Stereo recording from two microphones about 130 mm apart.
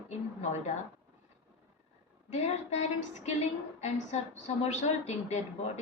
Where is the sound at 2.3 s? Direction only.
60° left (ahead or behind).